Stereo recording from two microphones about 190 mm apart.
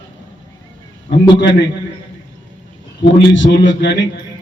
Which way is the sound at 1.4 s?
70° left (ahead or behind).